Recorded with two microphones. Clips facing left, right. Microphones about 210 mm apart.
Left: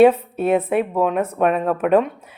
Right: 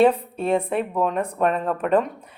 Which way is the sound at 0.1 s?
5° left (ahead or behind).